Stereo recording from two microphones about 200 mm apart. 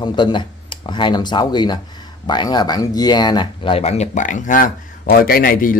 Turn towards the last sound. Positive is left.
turn(degrees=45)  # may be behind; listen again after turning